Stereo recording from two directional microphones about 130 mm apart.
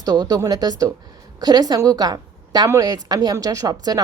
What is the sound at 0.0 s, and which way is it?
A woman's voice, 30° right (ahead or behind).